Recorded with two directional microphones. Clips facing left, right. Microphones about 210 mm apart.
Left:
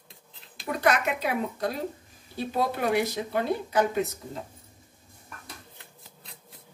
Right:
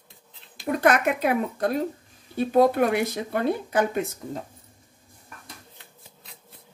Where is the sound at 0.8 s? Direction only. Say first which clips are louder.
Right 4 dB; 50° right (ahead or behind).